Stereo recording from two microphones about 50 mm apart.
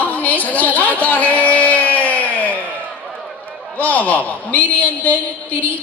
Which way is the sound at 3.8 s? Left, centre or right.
Left.